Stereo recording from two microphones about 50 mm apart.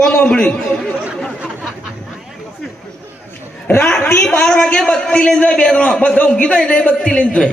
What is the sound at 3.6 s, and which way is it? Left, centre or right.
Speech, left.